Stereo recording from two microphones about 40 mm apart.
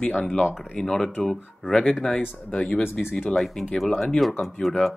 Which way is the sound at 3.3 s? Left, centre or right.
Centre.